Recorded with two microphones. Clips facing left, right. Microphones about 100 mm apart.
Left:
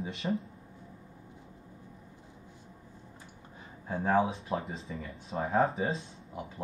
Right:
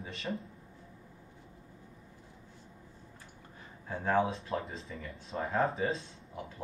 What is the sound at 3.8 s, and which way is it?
Speech, 15° left (ahead or behind).